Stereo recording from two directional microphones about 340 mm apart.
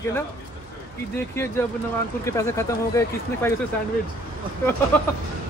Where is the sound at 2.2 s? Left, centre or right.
Centre.